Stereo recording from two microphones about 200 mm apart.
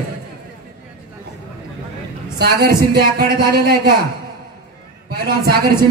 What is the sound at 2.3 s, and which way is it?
Speech, 50° right (ahead or behind).